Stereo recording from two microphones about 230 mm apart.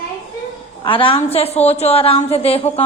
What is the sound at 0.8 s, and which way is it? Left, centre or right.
A woman's voice, left.